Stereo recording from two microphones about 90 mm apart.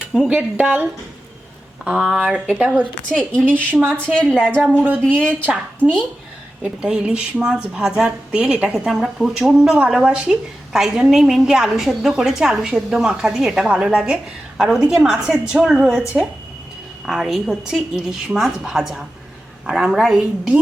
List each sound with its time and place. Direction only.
0.1 s a woman's voice: 10° right (ahead or behind)
3.4 s a woman's voice: 20° right (ahead or behind)
3.9 s a woman's voice: 10° left (ahead or behind)
4.8 s a woman's voice: 20° right (ahead or behind)